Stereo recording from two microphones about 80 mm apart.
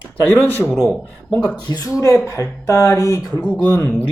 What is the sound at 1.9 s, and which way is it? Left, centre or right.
Speech, left.